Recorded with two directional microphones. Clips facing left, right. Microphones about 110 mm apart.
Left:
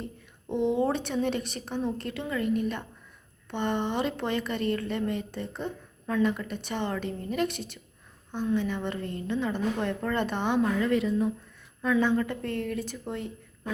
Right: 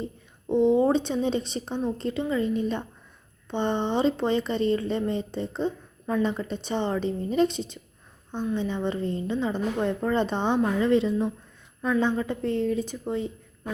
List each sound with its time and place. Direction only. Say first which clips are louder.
0.4 s a woman's voice: right 6 dB; 15° right (ahead or behind)